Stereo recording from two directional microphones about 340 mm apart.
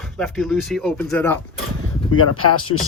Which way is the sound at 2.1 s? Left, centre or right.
Left.